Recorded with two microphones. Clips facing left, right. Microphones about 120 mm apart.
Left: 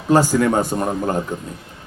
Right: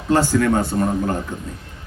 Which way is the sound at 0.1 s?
10° left (ahead or behind).